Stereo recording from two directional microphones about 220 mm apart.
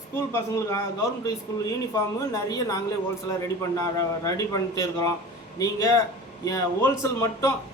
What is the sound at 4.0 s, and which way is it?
A man's voice, 15° left (ahead or behind).